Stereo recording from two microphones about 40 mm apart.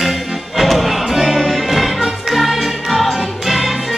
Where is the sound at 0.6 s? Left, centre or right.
Centre.